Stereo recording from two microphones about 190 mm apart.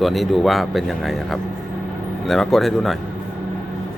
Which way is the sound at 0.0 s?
Centre (ahead or behind).